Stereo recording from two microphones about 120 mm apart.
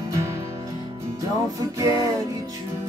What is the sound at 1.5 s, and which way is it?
Music, 30° right (ahead or behind).